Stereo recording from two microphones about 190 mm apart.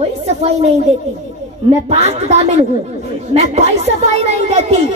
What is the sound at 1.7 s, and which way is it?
Speech, 35° right (ahead or behind).